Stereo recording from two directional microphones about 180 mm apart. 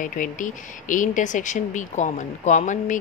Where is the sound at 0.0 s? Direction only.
45° left (ahead or behind).